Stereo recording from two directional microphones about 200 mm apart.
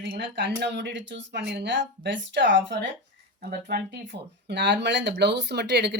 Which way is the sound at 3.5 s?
55° right (ahead or behind).